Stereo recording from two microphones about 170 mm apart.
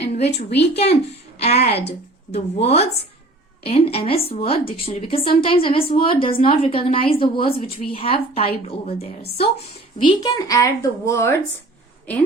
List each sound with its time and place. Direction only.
0.0 s a sound: 40° left (ahead or behind)
0.3 s speech: 80° left
1.4 s a woman's voice: 40° left (ahead or behind)
7.3 s a woman's voice: 60° left (ahead or behind)
7.9 s a woman's voice: 35° left (ahead or behind); by 11.3 s 15° left (ahead or behind)